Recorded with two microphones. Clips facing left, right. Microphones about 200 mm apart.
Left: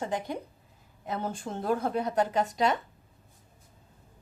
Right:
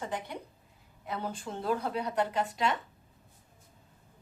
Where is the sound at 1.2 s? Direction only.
45° left (ahead or behind).